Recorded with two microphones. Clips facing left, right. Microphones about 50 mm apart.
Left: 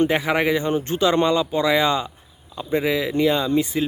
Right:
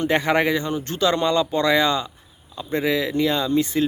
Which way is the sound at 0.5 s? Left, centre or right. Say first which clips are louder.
Left 3 dB; left.